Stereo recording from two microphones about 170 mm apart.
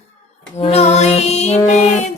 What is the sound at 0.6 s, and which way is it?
Music, 40° left (ahead or behind).